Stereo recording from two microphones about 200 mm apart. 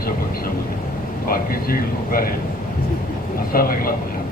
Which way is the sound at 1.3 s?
45° left (ahead or behind).